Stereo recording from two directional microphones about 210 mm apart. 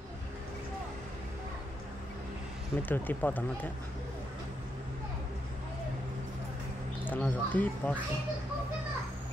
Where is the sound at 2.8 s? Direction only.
10° left (ahead or behind).